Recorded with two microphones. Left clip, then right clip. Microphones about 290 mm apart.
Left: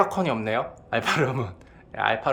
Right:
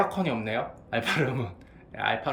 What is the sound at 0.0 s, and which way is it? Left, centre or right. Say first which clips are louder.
Speech: left 4 dB; centre.